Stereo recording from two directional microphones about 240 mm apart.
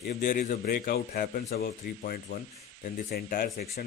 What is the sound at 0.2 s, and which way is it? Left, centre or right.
Speech, left.